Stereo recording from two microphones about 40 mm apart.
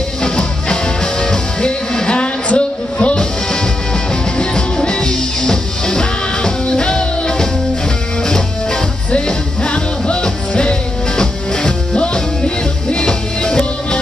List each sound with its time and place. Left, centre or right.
0.2 s music: centre
4.4 s music: left
9.1 s music: left